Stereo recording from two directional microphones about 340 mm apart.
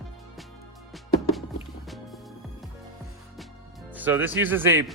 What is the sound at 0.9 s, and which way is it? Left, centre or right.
Music, centre.